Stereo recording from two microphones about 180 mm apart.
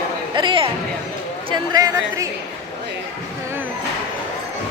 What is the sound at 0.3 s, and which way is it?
A woman's voice, 25° right (ahead or behind).